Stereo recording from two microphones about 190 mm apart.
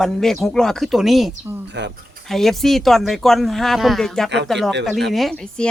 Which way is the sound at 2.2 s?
Centre (ahead or behind).